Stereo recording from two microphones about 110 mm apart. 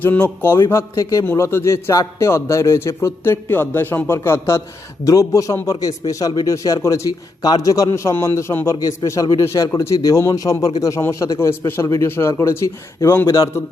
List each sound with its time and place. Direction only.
0.0 s a man's voice: 20° left (ahead or behind)